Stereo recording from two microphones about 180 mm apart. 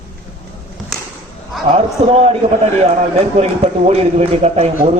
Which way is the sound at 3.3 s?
35° right (ahead or behind).